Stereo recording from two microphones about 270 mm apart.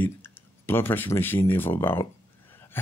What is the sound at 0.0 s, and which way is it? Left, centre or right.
Speech, centre.